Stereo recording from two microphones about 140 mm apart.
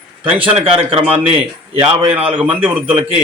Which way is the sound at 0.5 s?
40° right (ahead or behind).